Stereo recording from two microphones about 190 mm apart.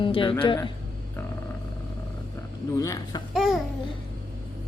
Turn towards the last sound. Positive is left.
turn(degrees=0)  # may be behind; listen again after turning